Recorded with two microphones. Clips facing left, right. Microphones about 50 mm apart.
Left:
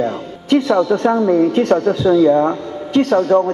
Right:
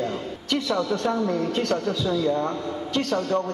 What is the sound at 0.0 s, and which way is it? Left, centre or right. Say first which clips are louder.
A man's voice: left 7 dB; left.